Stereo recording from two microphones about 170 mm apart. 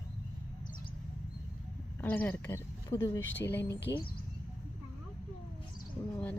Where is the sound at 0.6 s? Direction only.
25° left (ahead or behind).